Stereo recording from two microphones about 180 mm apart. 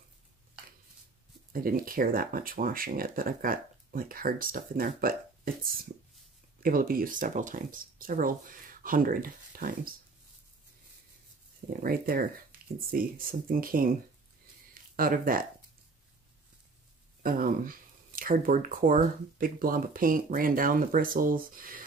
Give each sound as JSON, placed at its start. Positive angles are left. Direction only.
{"t": 1.5, "sound": "speech", "side_deg": -50}
{"t": 11.8, "sound": "speech", "side_deg": -55}
{"t": 14.7, "sound": "a sound", "side_deg": -50}
{"t": 17.2, "sound": "speech", "side_deg": -50}